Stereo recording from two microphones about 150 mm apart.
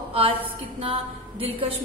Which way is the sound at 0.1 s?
40° right (ahead or behind).